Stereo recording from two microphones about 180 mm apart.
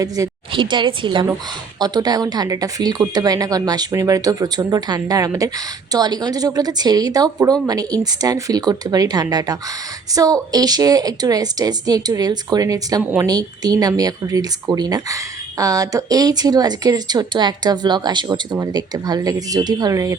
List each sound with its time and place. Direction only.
0.0 s a woman's voice: 20° right (ahead or behind)